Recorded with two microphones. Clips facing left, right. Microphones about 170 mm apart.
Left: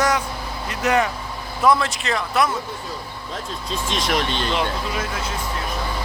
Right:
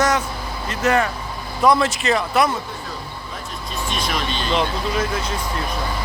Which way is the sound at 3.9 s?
80° left.